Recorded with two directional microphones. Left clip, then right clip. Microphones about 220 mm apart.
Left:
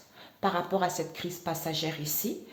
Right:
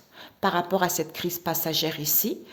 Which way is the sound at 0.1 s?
50° right (ahead or behind).